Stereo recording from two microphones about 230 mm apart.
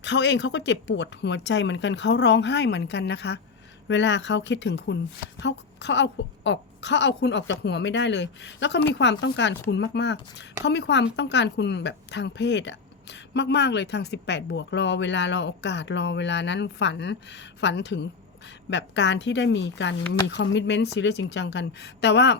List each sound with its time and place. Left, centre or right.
0.0 s a woman's voice: left